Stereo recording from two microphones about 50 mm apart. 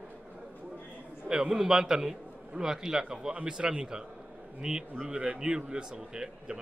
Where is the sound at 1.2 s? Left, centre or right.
Centre.